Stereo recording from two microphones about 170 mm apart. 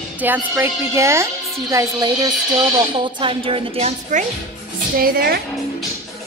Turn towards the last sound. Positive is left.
turn(degrees=-65)  # may be behind; listen again after turning